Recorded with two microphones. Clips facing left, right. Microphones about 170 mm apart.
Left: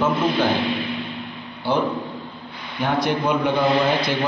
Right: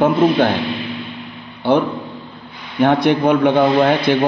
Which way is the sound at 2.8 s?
70° right (ahead or behind).